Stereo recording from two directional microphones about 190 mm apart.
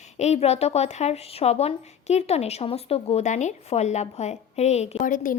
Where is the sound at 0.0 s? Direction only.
35° left (ahead or behind).